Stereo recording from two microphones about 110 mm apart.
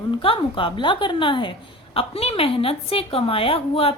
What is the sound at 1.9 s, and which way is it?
A woman's voice, 65° left (ahead or behind).